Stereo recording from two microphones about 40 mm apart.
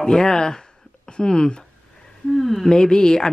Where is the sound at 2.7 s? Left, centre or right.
Centre.